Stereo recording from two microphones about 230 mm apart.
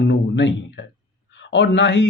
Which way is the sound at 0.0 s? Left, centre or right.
Left.